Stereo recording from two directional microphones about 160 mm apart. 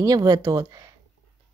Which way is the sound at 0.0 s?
25° right (ahead or behind).